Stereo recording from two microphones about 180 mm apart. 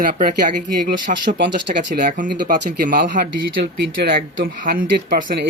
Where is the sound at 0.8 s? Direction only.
65° right (ahead or behind).